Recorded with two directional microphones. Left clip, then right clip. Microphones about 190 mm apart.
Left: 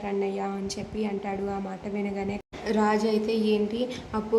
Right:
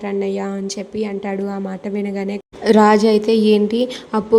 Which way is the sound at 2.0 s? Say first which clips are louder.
Right 7 dB; 25° right (ahead or behind).